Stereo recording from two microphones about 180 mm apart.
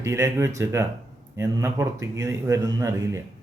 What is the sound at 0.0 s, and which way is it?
Speech, 15° right (ahead or behind).